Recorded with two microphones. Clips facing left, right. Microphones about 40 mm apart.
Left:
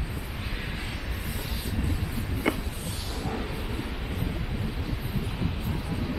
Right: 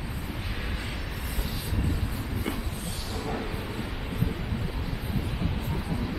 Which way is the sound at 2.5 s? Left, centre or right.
Left.